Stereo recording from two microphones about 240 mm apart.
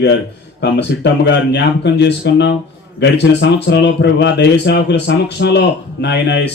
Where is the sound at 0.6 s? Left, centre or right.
Left.